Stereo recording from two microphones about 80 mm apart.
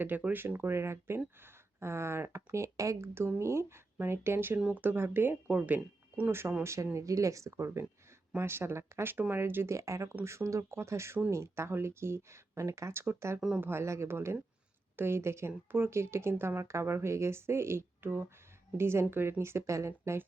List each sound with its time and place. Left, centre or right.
0.0 s speech: right
6.6 s speech: right